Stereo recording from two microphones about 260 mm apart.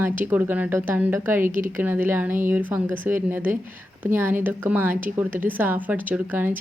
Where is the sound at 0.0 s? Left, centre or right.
Centre.